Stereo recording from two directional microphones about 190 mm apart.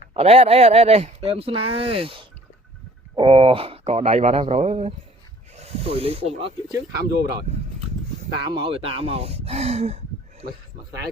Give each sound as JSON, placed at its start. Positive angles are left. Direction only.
{"t": 0.1, "sound": "speech", "side_deg": -30}
{"t": 6.7, "sound": "speech", "side_deg": -20}
{"t": 8.4, "sound": "speech", "side_deg": -25}